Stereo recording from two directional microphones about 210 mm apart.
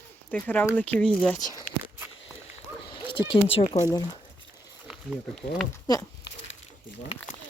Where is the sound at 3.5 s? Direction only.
25° left (ahead or behind).